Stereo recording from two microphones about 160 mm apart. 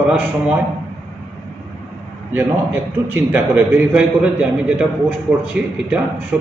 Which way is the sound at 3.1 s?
10° right (ahead or behind).